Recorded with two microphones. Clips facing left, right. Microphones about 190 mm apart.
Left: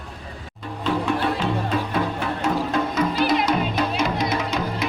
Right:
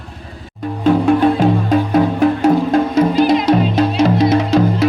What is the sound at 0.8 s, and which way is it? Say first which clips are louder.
Music: right 11 dB; 45° right (ahead or behind).